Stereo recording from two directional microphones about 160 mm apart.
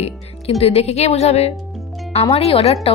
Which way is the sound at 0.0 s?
40° left (ahead or behind).